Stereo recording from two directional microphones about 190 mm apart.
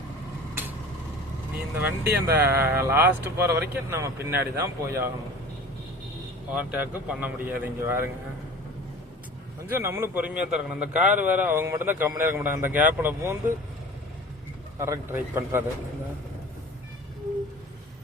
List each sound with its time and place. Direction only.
1.7 s a man's voice: 10° right (ahead or behind)
6.5 s a man's voice: 5° right (ahead or behind)
9.6 s a man's voice: 10° right (ahead or behind)
14.8 s a man's voice: 15° right (ahead or behind)